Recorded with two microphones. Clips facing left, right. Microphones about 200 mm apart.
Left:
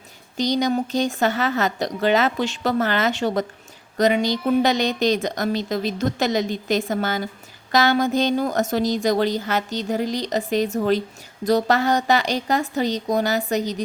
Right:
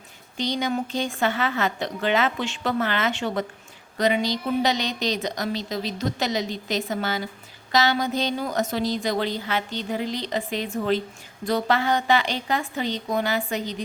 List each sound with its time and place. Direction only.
0.3 s a woman's voice: 40° left (ahead or behind)